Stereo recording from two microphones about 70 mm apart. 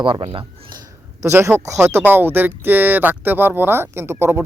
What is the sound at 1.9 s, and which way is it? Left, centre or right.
Speech, right.